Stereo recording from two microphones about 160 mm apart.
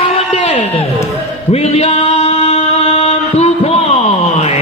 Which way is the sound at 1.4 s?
40° left (ahead or behind).